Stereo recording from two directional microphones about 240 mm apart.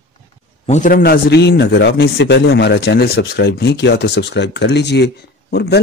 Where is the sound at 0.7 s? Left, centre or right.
Left.